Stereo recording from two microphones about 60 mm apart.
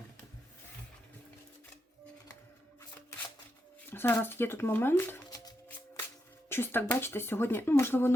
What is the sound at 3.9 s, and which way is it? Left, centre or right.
Speech, left.